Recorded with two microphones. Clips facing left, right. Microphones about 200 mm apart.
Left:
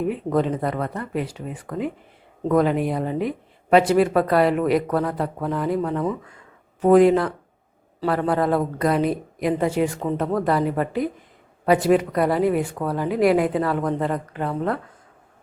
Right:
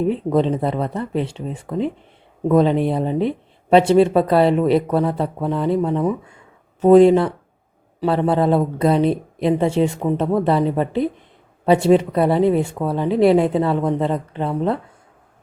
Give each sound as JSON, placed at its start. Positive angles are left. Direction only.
{"t": 0.3, "sound": "speech", "side_deg": -30}